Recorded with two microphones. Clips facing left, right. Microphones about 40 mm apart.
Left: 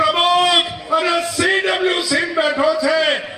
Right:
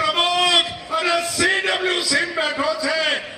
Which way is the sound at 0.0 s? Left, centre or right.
Centre.